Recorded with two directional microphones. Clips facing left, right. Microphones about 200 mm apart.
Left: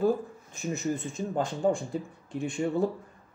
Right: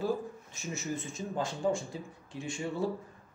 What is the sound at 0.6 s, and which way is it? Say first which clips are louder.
Speech: left 6 dB; 60° left (ahead or behind).